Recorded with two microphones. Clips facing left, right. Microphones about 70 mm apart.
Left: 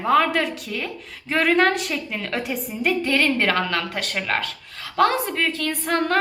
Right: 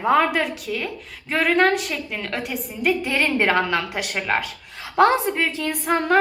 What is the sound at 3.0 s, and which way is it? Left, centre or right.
A woman's voice, centre.